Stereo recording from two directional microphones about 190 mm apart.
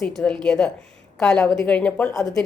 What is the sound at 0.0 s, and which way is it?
Speech, 5° left (ahead or behind).